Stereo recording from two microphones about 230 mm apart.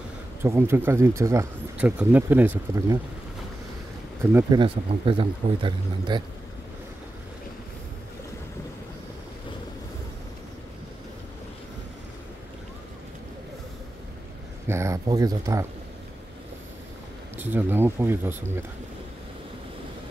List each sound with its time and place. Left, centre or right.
0.4 s speech: centre
4.2 s speech: centre
4.6 s speech: right
14.7 s speech: centre
17.4 s speech: centre